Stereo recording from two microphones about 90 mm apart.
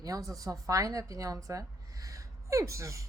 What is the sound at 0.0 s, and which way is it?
A woman's voice, 40° right (ahead or behind).